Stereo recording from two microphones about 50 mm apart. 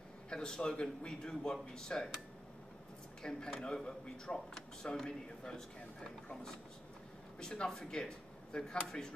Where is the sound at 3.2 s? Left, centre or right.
Centre.